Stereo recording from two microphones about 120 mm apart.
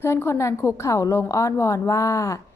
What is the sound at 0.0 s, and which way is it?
A woman's voice, 20° left (ahead or behind).